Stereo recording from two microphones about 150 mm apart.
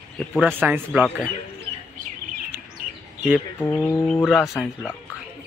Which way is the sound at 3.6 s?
15° left (ahead or behind).